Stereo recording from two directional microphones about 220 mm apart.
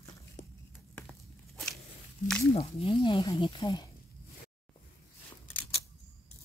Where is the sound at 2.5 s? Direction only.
25° left (ahead or behind).